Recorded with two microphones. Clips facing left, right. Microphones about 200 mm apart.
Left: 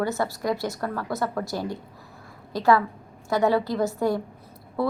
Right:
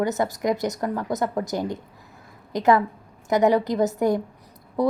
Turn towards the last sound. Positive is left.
turn(degrees=-15)  # may be behind; listen again after turning